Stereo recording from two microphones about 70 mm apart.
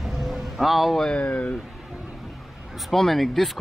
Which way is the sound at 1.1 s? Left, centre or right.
Centre.